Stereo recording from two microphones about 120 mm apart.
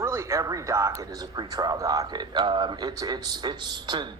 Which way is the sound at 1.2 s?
35° right (ahead or behind).